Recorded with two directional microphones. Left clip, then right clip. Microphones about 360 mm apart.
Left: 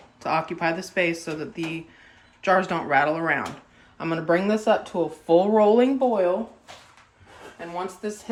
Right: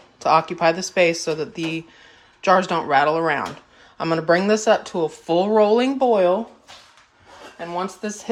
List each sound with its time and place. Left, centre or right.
0.2 s speech: centre
8.0 s speech: right